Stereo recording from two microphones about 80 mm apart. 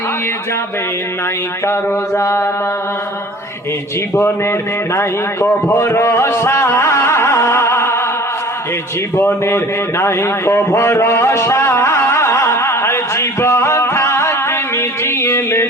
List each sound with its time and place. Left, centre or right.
1.6 s mantra: left
4.1 s a man's voice: left
9.1 s a sound: left